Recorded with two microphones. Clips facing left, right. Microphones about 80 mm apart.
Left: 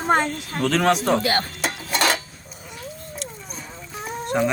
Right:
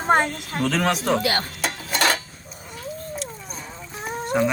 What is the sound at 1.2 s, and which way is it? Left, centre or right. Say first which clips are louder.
Speech: left 1 dB; left.